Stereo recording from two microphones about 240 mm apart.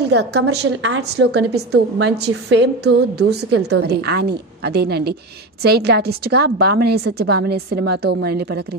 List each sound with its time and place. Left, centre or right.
0.0 s a woman's voice: right